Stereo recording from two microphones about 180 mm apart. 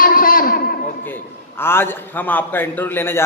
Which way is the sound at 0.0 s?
50° left (ahead or behind).